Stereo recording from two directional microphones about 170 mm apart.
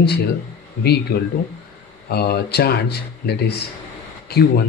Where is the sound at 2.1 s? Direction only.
70° left (ahead or behind).